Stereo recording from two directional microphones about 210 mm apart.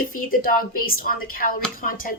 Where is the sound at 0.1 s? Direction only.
40° left (ahead or behind).